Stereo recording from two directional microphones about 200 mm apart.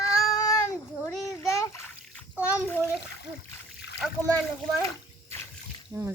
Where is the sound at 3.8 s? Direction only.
60° left (ahead or behind).